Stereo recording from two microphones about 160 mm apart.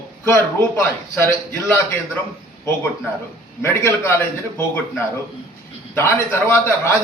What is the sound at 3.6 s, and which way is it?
A man's voice, 15° left (ahead or behind).